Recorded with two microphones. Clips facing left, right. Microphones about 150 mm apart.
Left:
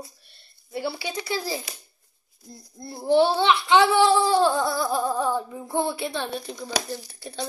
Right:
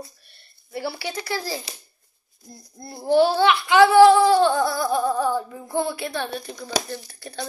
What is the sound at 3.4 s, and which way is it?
Child singing, 25° left (ahead or behind).